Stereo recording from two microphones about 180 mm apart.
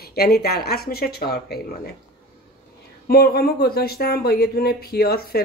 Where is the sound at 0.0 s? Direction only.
60° left (ahead or behind).